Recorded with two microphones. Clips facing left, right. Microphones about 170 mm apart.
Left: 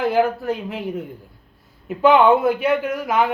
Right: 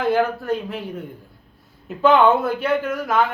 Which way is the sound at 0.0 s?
10° left (ahead or behind).